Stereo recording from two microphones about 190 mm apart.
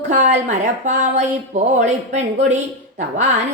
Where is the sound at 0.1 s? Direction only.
40° right (ahead or behind).